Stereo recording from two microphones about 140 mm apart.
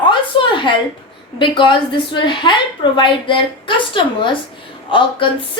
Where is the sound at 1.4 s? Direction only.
35° left (ahead or behind).